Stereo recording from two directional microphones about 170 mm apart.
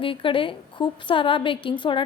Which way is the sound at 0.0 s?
30° left (ahead or behind).